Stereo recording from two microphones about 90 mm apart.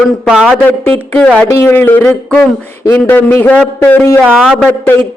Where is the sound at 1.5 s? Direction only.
30° left (ahead or behind).